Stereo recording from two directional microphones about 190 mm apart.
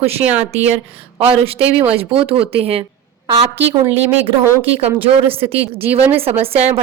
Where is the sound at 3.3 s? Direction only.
20° right (ahead or behind).